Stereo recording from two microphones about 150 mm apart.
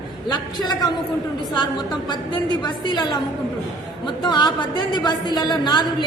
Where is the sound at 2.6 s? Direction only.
30° left (ahead or behind).